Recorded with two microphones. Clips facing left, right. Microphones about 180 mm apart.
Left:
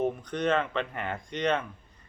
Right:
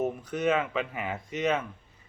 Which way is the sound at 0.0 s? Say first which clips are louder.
Even; 5° right (ahead or behind).